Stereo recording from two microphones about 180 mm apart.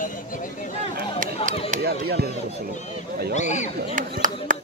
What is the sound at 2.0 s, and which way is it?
Speech, 60° right (ahead or behind).